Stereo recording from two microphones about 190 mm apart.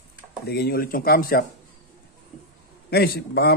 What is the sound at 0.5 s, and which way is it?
Speech, 55° left (ahead or behind).